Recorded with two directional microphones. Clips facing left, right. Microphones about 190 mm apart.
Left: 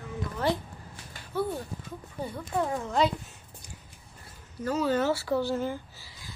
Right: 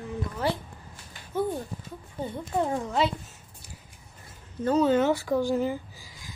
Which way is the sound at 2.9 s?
5° right (ahead or behind).